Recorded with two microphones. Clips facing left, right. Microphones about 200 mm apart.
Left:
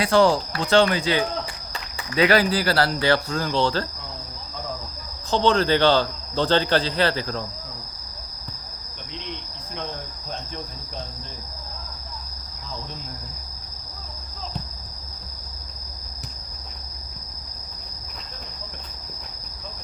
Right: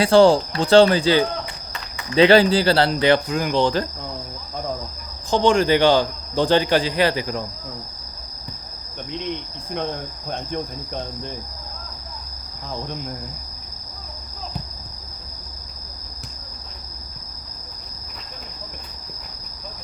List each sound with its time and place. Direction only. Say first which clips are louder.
0.0 s speech: right 5 dB; 30° right (ahead or behind)
5.3 s speech: right 3 dB; 15° right (ahead or behind)
10.2 s cricket: right 8 dB; 55° right (ahead or behind)